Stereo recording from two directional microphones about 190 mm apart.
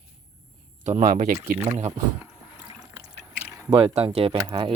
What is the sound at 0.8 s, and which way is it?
Speech, 40° right (ahead or behind).